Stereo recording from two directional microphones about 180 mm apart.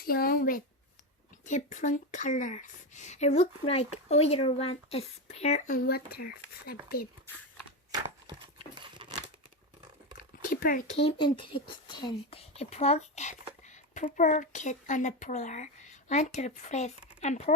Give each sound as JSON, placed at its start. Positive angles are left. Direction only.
{"t": 0.0, "sound": "speech", "side_deg": 55}
{"t": 1.5, "sound": "speech", "side_deg": 40}
{"t": 7.9, "sound": "a sound", "side_deg": -20}
{"t": 8.8, "sound": "crumpling", "side_deg": -25}
{"t": 10.5, "sound": "speech", "side_deg": 50}
{"t": 10.9, "sound": "speech", "side_deg": 30}